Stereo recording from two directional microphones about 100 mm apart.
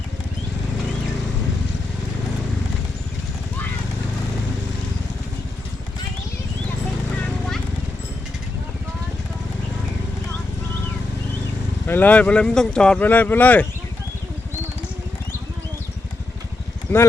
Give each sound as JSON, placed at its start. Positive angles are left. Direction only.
{"t": 11.9, "sound": "speech", "side_deg": 20}
{"t": 16.9, "sound": "speech", "side_deg": 20}